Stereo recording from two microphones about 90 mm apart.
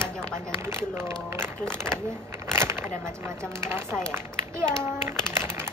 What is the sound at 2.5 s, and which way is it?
Speech, 25° right (ahead or behind).